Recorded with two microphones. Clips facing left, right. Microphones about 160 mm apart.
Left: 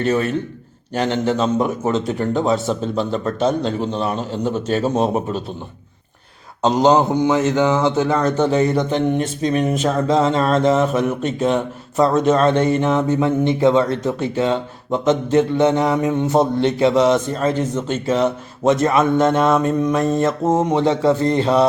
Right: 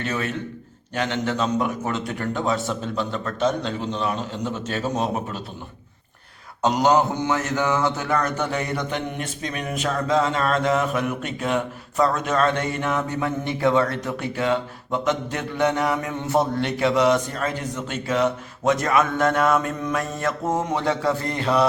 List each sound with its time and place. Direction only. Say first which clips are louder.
0.0 s a man's voice: left 8 dB; 35° left (ahead or behind)
6.6 s speech: left 4 dB; 25° left (ahead or behind)